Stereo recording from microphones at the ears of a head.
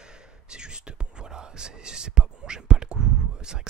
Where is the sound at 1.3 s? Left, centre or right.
Right.